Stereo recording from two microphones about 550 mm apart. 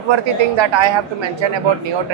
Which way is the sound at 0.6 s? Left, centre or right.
Right.